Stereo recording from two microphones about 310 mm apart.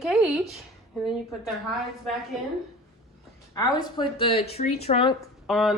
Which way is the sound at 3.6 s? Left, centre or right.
Centre.